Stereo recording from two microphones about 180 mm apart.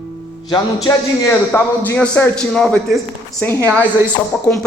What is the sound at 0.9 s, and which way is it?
A man's voice, 15° left (ahead or behind).